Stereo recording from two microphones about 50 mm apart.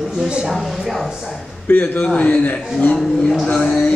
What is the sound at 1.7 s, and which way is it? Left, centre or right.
Speech, left.